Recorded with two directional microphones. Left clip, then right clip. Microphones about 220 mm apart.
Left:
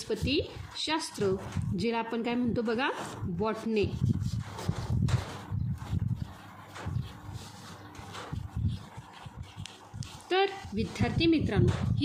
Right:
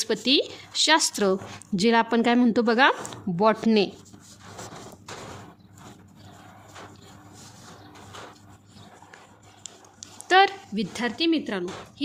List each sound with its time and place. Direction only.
0.0 s a woman's voice: 45° right (ahead or behind)
10.2 s a woman's voice: 40° right (ahead or behind)